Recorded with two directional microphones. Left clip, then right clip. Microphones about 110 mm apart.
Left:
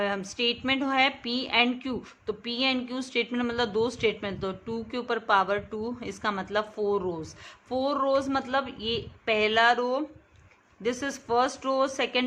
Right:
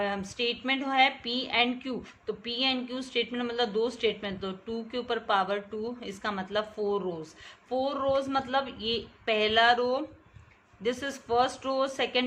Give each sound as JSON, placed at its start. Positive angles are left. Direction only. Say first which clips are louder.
{"t": 0.0, "sound": "a woman's voice", "louder": "left 3 dB", "side_deg": 45}